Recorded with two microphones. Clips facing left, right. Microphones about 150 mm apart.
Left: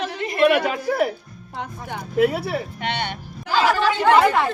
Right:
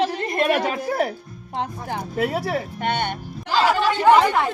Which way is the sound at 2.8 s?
50° right (ahead or behind).